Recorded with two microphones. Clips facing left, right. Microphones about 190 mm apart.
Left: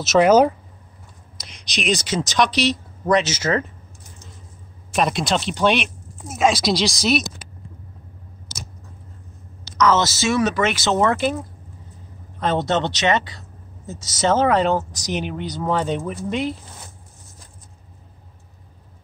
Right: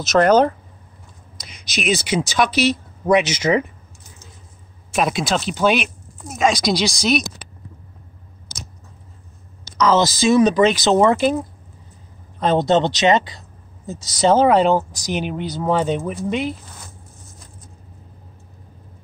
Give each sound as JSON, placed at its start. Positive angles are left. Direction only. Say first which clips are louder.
{"t": 0.0, "sound": "speech", "louder": "even", "side_deg": 5}
{"t": 1.4, "sound": "speech", "louder": "right 2 dB", "side_deg": -5}
{"t": 4.9, "sound": "speech", "louder": "right 1 dB", "side_deg": -5}
{"t": 9.8, "sound": "speech", "louder": "right 4 dB", "side_deg": -15}
{"t": 12.4, "sound": "speech", "louder": "right 4 dB", "side_deg": -15}